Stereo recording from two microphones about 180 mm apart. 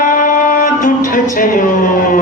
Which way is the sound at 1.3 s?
50° left (ahead or behind).